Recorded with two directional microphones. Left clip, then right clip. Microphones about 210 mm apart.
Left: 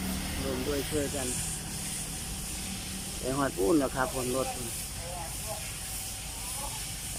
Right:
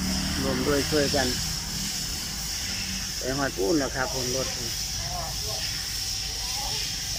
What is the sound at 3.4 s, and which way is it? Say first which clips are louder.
Speech: right 1 dB; 5° left (ahead or behind).